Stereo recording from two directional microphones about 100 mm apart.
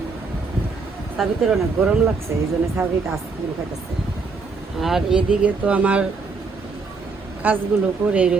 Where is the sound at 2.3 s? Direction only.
25° right (ahead or behind).